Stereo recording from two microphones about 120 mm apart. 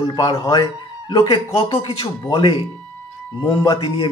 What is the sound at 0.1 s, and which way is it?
Speech, 45° left (ahead or behind).